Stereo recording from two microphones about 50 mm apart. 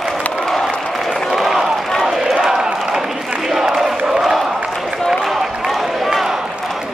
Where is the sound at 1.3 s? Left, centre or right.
Centre.